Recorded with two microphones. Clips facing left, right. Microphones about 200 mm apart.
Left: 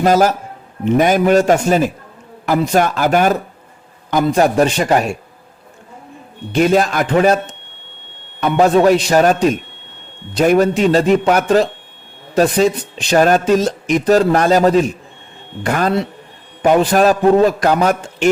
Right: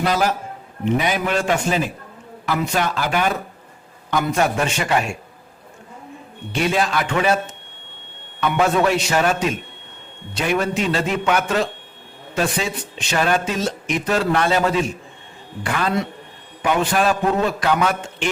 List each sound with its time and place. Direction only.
0.0 s a man's voice: 45° left (ahead or behind)
4.1 s speech: 35° left (ahead or behind)
6.5 s a man's voice: 45° left (ahead or behind)
8.4 s a man's voice: 35° left (ahead or behind)